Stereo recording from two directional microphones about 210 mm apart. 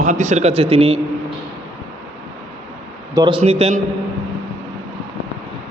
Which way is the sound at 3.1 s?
20° right (ahead or behind).